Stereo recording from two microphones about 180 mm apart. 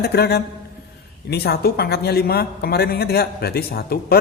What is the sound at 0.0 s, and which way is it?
A man's voice, 65° left (ahead or behind).